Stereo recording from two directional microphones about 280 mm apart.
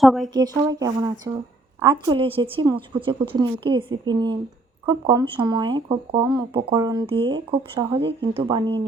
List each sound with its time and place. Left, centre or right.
0.0 s speech: centre
0.3 s a woman's voice: centre